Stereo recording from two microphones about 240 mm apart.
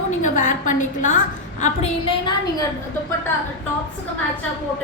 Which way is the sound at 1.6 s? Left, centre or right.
Left.